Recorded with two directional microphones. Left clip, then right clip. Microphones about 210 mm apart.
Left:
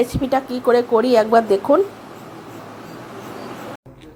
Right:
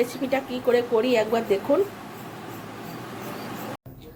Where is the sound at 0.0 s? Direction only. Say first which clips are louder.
Left 6 dB; 25° left (ahead or behind).